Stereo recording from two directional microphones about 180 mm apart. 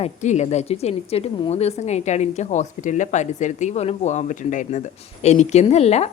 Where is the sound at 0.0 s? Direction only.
40° left (ahead or behind).